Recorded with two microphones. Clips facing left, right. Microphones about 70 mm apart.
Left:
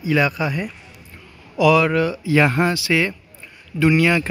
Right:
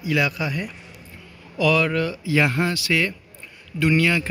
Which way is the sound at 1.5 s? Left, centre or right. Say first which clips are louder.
Left 5 dB; centre.